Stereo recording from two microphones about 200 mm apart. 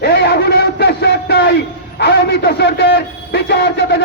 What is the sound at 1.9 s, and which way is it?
A man's voice, 60° left (ahead or behind).